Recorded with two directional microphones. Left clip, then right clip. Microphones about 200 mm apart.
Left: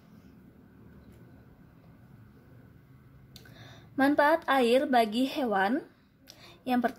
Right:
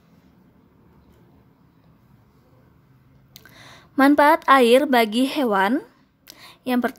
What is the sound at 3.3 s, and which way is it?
A woman's voice, 35° right (ahead or behind).